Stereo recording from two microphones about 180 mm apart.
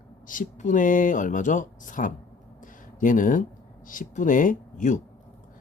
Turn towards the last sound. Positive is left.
turn(degrees=45)  # may be behind; listen again after turning